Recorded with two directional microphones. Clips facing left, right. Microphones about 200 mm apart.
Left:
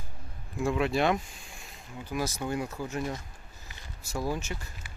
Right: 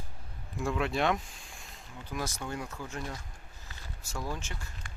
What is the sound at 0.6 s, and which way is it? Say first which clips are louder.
Speech: left 3 dB; 5° left (ahead or behind).